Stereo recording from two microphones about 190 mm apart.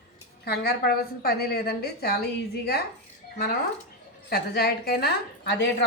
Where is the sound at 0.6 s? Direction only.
55° left (ahead or behind).